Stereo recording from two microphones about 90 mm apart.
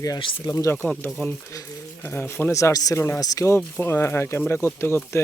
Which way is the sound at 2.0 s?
25° left (ahead or behind).